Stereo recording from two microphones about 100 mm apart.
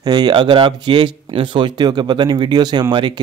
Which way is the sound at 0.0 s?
45° right (ahead or behind).